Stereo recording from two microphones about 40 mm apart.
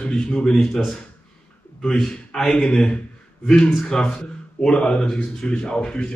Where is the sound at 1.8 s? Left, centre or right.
Centre.